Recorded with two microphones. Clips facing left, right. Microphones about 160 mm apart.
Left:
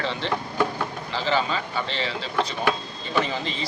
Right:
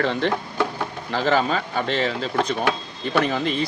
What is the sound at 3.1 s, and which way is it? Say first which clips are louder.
Speech: right 5 dB; 55° right (ahead or behind).